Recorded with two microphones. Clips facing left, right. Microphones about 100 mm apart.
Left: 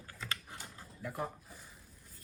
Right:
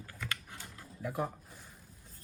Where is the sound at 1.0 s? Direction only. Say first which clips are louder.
Right 4 dB; 5° right (ahead or behind).